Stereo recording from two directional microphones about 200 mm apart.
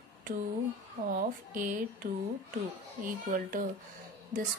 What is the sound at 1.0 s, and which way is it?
Speech, 40° right (ahead or behind).